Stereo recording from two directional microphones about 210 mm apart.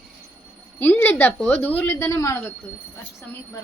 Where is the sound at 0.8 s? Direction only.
10° left (ahead or behind).